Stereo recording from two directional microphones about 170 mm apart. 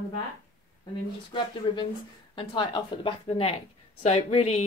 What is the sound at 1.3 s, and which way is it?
A woman's voice, 25° left (ahead or behind).